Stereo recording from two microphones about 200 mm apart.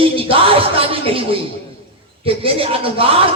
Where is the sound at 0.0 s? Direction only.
25° right (ahead or behind).